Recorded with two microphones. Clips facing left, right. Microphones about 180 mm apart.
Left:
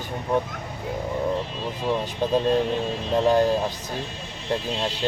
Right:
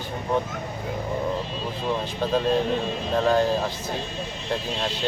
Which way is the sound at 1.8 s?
15° left (ahead or behind).